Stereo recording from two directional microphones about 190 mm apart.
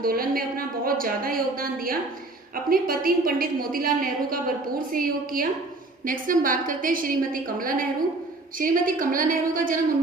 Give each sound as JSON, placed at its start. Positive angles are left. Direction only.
{"t": 0.0, "sound": "a woman's voice", "side_deg": -50}